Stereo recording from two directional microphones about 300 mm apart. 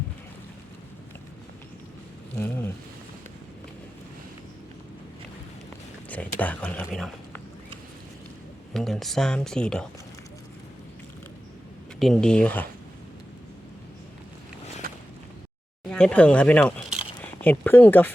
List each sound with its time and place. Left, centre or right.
2.3 s speech: centre
6.1 s speech: centre
8.7 s speech: centre
11.9 s speech: centre
14.8 s a sound: right
15.9 s speech: centre